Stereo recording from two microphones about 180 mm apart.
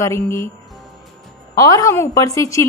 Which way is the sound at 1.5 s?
20° left (ahead or behind).